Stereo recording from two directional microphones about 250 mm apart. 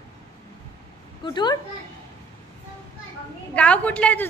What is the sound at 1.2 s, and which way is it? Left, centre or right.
Speech, centre.